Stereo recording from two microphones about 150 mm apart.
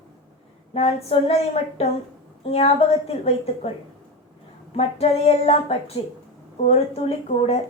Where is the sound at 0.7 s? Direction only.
45° left (ahead or behind).